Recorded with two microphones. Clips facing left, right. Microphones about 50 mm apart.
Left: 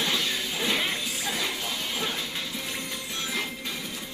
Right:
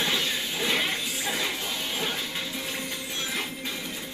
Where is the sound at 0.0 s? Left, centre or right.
Centre.